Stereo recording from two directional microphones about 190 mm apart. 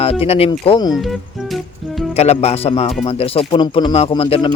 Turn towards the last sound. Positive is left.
turn(degrees=30)  # may be behind; listen again after turning